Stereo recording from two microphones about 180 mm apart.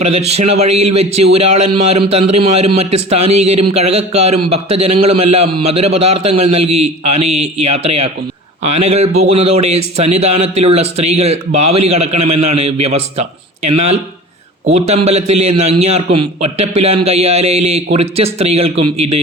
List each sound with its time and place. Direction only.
0.0 s a man's voice: 35° right (ahead or behind)